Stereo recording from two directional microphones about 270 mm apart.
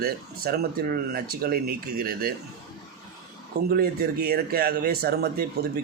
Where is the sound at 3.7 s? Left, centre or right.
Right.